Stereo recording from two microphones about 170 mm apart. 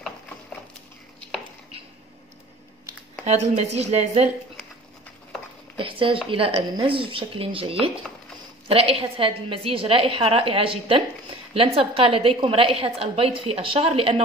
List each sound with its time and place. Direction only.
3.3 s a woman's voice: 40° right (ahead or behind)
5.8 s a woman's voice: 30° right (ahead or behind)